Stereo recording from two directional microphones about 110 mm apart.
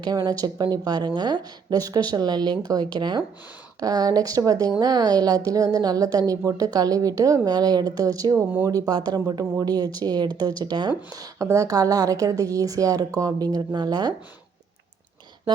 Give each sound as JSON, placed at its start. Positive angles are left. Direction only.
{"t": 0.0, "sound": "a woman's voice", "side_deg": -40}
{"t": 8.9, "sound": "a woman's voice", "side_deg": -35}